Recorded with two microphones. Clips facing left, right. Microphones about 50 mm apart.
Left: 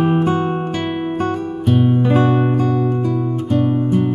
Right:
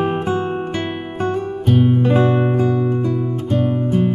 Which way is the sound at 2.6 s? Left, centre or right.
Centre.